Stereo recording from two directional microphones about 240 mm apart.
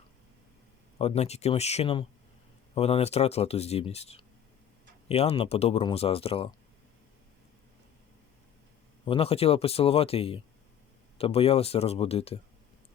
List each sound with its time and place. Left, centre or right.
0.9 s speech: left
9.0 s speech: left